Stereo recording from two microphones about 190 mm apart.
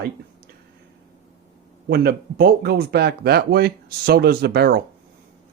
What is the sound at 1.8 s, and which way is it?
Speech, 55° right (ahead or behind).